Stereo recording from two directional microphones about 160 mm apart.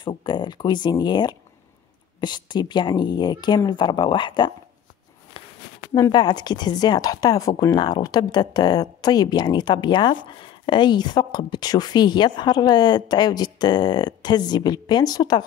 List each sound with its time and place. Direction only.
0.0 s speech: 30° left (ahead or behind)
5.4 s a sound: 30° left (ahead or behind)
5.9 s speech: 25° left (ahead or behind)